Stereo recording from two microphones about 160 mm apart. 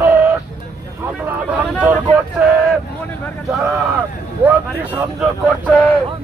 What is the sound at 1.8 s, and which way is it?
Speech, 5° right (ahead or behind).